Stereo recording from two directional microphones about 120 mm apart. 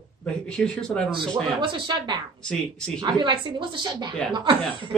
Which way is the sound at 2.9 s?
40° right (ahead or behind).